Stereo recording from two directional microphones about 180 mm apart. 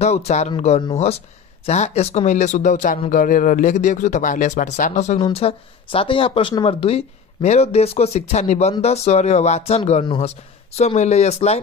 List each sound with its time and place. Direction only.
0.0 s speech: 35° left (ahead or behind)
5.2 s speech: 30° left (ahead or behind)